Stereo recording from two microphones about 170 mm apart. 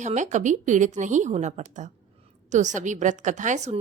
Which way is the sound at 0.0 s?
45° right (ahead or behind).